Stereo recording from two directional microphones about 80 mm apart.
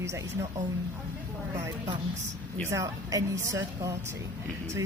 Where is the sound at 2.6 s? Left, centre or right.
Right.